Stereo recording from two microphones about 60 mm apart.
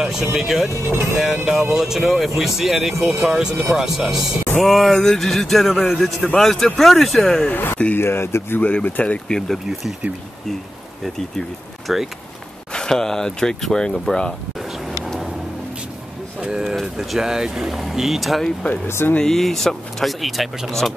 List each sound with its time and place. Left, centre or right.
0.0 s speech: centre
0.7 s speech: right
1.1 s speech: centre
7.5 s speech: left
8.5 s speech: left
11.9 s speech: centre
12.7 s speech: centre
16.3 s a sound: centre
16.7 s speech: centre
18.9 s speech: left
19.1 s speech: centre